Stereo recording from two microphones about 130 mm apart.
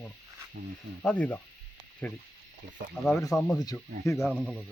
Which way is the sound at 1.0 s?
10° left (ahead or behind).